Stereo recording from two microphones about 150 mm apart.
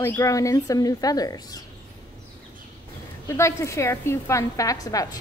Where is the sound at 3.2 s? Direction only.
20° left (ahead or behind).